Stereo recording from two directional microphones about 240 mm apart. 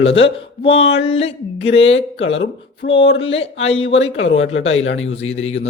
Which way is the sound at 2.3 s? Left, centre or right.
Left.